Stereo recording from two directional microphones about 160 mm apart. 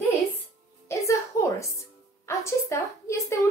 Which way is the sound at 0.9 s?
20° left (ahead or behind).